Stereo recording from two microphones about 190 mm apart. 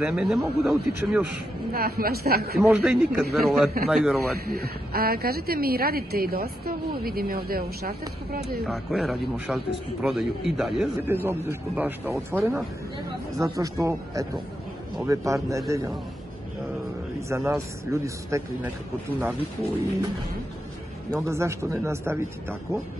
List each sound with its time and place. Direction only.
0.0 s speech: 5° right (ahead or behind)
1.7 s a woman's voice: 50° right (ahead or behind)
2.7 s speech: 5° right (ahead or behind)
4.5 s a woman's voice: 55° right (ahead or behind)
8.6 s speech: centre (ahead or behind); by 15.6 s 15° right (ahead or behind)
17.3 s speech: 15° right (ahead or behind)
21.1 s speech: 15° right (ahead or behind)